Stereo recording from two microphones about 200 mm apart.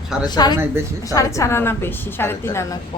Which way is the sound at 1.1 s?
15° left (ahead or behind).